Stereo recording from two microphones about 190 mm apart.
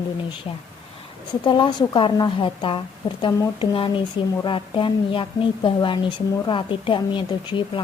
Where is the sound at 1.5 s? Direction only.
25° left (ahead or behind).